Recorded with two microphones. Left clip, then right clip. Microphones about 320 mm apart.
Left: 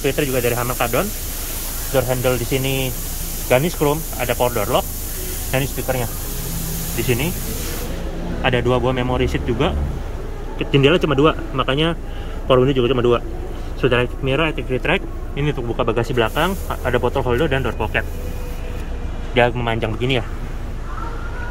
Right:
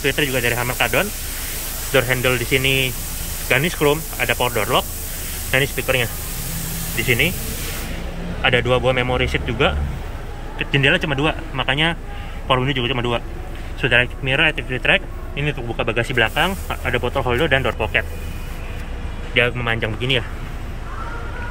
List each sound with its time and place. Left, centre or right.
0.0 s speech: centre
8.4 s speech: centre
19.3 s speech: centre